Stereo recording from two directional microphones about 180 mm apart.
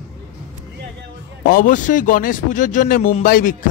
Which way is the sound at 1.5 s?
50° left (ahead or behind).